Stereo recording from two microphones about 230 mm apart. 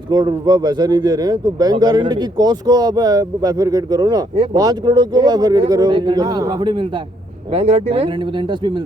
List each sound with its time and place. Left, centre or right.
0.1 s speech: centre